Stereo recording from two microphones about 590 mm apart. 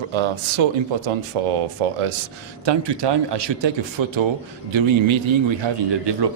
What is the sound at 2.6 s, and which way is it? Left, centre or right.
Speech, right.